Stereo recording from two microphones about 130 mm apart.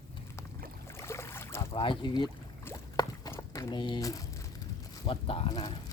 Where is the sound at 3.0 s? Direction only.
30° left (ahead or behind).